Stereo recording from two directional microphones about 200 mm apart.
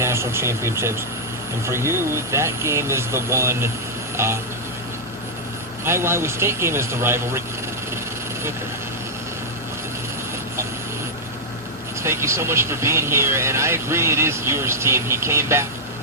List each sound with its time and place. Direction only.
0.0 s speech: 15° right (ahead or behind)
5.8 s speech: 10° right (ahead or behind)
12.0 s speech: 15° right (ahead or behind)